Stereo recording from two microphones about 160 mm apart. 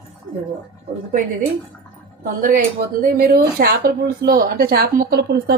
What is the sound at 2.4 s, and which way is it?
Speech, 60° right (ahead or behind).